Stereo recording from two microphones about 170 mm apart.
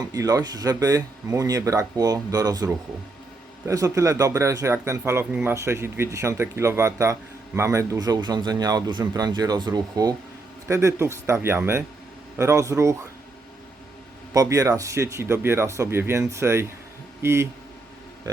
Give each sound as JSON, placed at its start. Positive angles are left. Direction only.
{"t": 0.0, "sound": "speech", "side_deg": -20}
{"t": 3.7, "sound": "speech", "side_deg": -20}
{"t": 14.3, "sound": "speech", "side_deg": -20}